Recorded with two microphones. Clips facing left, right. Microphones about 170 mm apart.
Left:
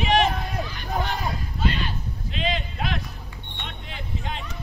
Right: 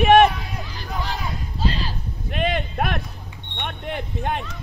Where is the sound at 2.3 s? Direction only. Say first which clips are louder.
Right 5 dB; 55° right (ahead or behind).